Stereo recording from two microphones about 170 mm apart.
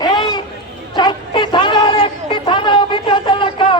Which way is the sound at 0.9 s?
25° left (ahead or behind).